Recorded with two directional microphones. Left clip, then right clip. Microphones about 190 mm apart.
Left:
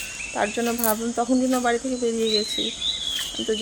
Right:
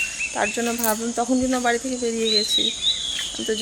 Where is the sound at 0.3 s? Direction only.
Centre (ahead or behind).